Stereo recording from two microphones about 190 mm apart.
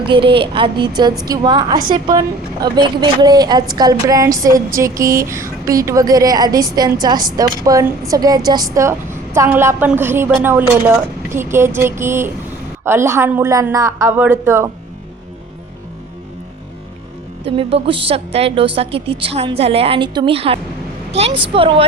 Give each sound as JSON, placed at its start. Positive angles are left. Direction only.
{"t": 0.0, "sound": "a woman's voice", "side_deg": -25}
{"t": 17.4, "sound": "a woman's voice", "side_deg": -30}